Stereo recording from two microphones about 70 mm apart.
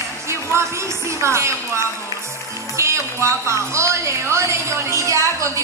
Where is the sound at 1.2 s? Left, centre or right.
Right.